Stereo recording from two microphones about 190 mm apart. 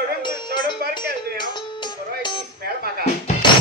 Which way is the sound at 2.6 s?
55° right (ahead or behind).